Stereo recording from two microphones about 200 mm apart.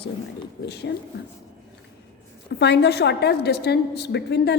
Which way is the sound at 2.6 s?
55° left (ahead or behind).